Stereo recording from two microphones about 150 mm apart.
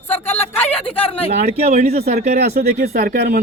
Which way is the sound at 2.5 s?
90° right.